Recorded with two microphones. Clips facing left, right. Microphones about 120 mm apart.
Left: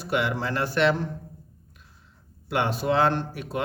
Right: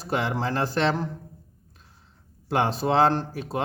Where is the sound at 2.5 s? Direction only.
35° right (ahead or behind).